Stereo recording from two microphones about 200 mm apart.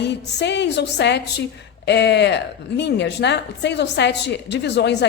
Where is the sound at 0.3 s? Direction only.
60° left (ahead or behind).